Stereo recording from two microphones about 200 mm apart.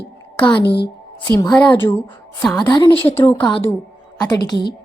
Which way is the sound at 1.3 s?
15° left (ahead or behind).